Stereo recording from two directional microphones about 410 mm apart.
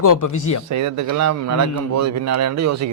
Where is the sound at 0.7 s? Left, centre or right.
Right.